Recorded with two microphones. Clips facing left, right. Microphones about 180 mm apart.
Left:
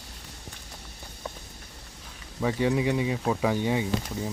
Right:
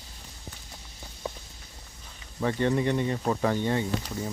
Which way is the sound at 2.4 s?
5° left (ahead or behind).